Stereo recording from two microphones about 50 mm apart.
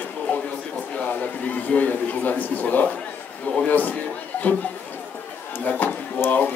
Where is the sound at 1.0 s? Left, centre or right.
Left.